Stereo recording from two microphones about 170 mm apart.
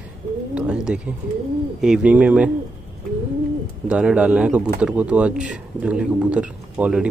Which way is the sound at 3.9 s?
5° right (ahead or behind).